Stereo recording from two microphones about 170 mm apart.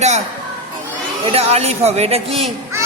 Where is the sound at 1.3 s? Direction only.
35° right (ahead or behind).